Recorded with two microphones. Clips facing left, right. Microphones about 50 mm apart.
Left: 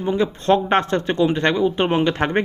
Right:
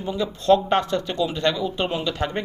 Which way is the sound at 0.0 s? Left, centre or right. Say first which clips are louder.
Left 5 dB; left.